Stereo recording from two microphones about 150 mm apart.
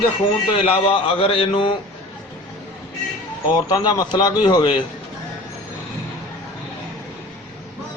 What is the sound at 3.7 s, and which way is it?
A man's voice, 30° left (ahead or behind).